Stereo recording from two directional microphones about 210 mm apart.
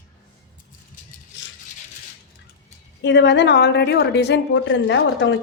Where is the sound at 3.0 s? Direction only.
55° left (ahead or behind).